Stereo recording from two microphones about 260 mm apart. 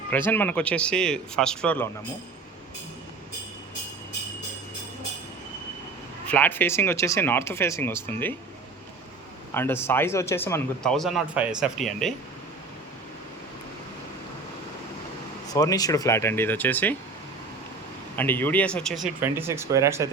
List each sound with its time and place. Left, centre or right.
0.1 s speech: centre
6.2 s a man's voice: centre
9.6 s a man's voice: centre
15.4 s a man's voice: centre
18.2 s speech: centre
19.0 s speech: centre